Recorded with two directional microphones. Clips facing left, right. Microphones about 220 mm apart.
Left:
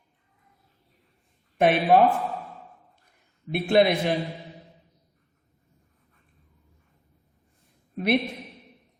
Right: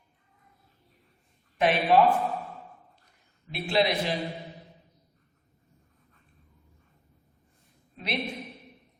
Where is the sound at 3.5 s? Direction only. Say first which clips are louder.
Left 6 dB; 55° left (ahead or behind).